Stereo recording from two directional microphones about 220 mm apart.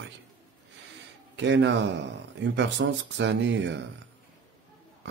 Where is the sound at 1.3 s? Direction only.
55° right (ahead or behind).